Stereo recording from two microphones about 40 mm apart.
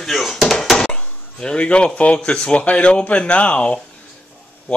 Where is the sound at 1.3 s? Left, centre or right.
Left.